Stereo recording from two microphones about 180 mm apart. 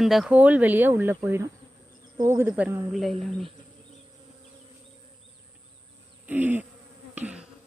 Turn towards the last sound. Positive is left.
turn(degrees=-5)  # may be behind; listen again after turning